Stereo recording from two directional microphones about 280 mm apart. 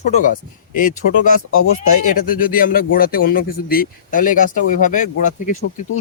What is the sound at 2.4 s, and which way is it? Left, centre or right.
Speech, left.